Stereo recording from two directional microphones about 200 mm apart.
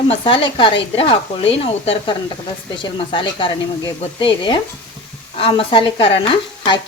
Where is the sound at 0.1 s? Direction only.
25° left (ahead or behind).